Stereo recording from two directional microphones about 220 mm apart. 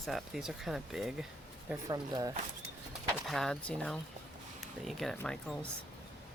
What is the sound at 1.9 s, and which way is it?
Speech, 15° right (ahead or behind).